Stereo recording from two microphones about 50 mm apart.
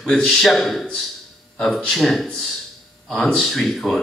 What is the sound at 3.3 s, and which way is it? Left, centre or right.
Speech, centre.